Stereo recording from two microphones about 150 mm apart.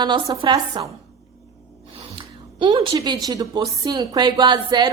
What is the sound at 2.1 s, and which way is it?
A woman's voice, 35° right (ahead or behind).